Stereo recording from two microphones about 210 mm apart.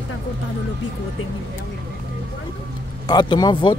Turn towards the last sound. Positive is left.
turn(degrees=20)  # may be behind; listen again after turning